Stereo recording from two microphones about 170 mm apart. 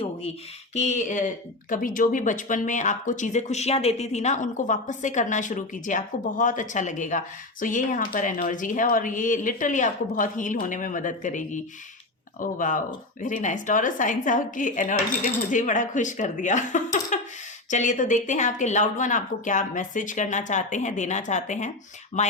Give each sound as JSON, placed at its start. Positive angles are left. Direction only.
{"t": 0.7, "sound": "speech", "side_deg": 40}